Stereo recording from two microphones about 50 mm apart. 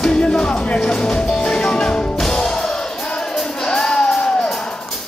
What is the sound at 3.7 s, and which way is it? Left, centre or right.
Music, centre.